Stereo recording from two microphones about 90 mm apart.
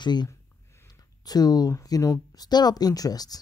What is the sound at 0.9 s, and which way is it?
Speech, 45° left (ahead or behind).